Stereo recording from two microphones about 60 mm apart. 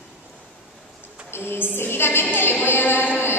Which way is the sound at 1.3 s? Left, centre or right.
Left.